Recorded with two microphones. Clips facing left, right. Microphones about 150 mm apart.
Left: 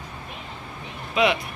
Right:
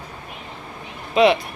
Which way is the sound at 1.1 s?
35° right (ahead or behind).